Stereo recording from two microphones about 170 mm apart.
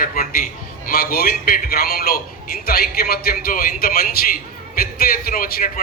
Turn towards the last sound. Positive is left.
turn(degrees=55)  # may be behind; listen again after turning